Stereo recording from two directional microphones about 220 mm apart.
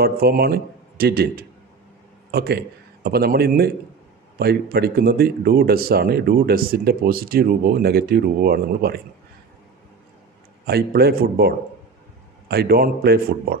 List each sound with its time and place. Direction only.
0.0 s a man's voice: 45° right (ahead or behind)
10.6 s speech: 45° right (ahead or behind)